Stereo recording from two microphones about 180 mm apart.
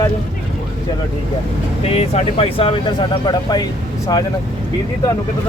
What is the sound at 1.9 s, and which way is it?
Speech, 35° left (ahead or behind).